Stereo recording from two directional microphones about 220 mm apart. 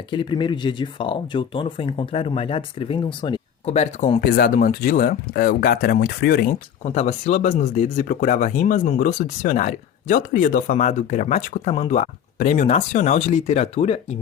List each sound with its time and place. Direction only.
0.1 s speech: 20° left (ahead or behind)